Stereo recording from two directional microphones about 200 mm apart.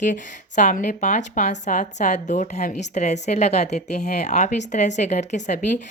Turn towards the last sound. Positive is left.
turn(degrees=35)  # may be behind; listen again after turning